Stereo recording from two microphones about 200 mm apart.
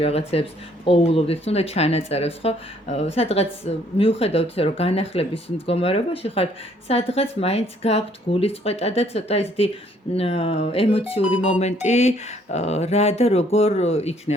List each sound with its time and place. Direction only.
0.0 s speech: 30° left (ahead or behind)